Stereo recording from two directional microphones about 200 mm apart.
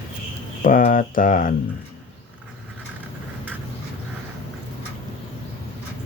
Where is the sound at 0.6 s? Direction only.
45° left (ahead or behind).